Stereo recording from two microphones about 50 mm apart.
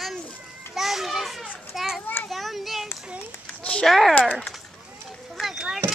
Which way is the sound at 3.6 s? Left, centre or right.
Left.